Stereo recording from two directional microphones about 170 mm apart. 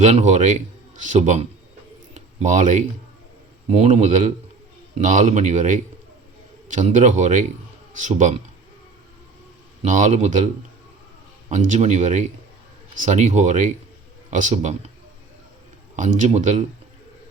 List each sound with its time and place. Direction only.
0.0 s a man's voice: 45° right (ahead or behind)
9.8 s a man's voice: 45° right (ahead or behind)
11.5 s a man's voice: 45° right (ahead or behind)
16.0 s a man's voice: 45° right (ahead or behind)